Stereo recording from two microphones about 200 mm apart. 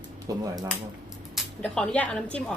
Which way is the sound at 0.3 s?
15° right (ahead or behind).